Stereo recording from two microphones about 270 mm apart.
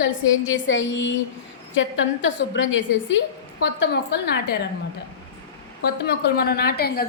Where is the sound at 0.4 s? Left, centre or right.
Left.